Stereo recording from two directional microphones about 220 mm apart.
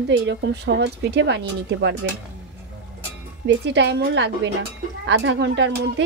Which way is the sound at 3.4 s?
55° right (ahead or behind).